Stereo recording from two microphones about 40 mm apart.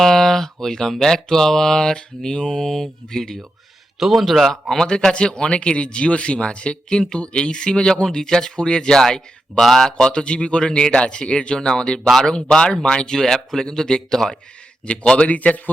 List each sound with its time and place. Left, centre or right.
0.0 s mantra: centre
4.0 s a man's voice: centre
4.9 s speech: left
9.6 s a man's voice: centre
10.0 s speech: left
13.1 s mantra: centre
14.8 s speech: left
15.3 s a man's voice: left